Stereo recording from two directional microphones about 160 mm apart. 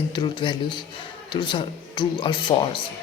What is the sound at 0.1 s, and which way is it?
Speech, 30° left (ahead or behind).